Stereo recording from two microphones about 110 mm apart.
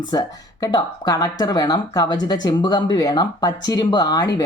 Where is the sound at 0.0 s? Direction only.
40° left (ahead or behind).